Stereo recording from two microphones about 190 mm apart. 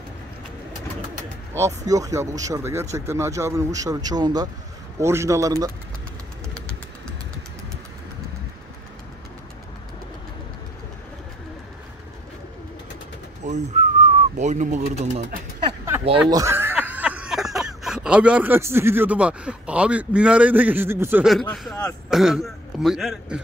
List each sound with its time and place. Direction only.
1.5 s speech: 15° right (ahead or behind)
13.5 s pigeon: 40° right (ahead or behind)
16.3 s speech: 15° right (ahead or behind)